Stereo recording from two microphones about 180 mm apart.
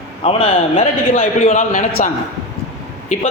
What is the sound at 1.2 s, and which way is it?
Speech, 45° left (ahead or behind).